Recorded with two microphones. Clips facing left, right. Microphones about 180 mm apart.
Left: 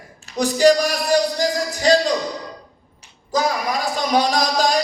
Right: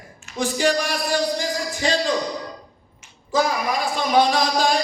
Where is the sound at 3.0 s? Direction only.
40° left (ahead or behind).